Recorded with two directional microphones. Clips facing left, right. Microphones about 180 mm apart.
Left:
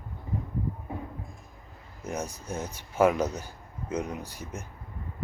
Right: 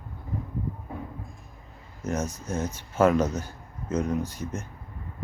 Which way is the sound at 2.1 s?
15° left (ahead or behind).